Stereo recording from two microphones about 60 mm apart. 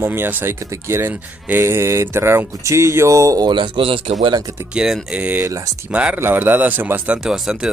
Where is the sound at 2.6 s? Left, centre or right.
Right.